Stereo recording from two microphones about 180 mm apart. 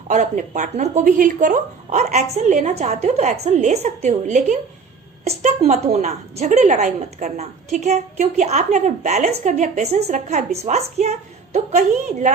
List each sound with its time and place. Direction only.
0.1 s a woman's voice: 40° right (ahead or behind)